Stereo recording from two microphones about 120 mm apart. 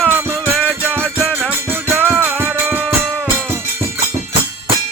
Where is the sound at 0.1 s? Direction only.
15° right (ahead or behind).